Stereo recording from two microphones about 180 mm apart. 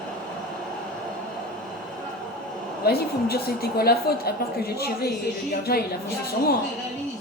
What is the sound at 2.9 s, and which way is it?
A woman's voice, 60° left (ahead or behind).